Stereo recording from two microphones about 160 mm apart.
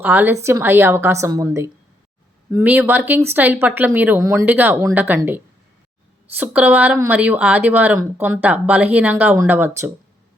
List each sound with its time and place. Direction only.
0.0 s speech: 10° right (ahead or behind)